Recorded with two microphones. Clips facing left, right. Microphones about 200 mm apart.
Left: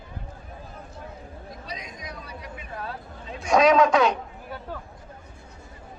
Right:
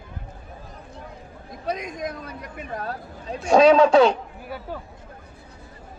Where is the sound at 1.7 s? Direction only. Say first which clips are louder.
Right 13 dB; 50° right (ahead or behind); by 4.2 s 30° right (ahead or behind).